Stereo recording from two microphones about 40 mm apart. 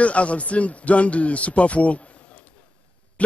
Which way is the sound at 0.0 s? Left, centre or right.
Left.